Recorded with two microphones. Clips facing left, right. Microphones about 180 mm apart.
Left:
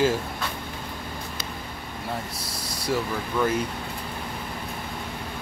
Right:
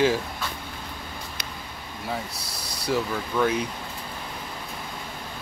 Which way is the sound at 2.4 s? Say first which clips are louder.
Left 3 dB; 25° left (ahead or behind).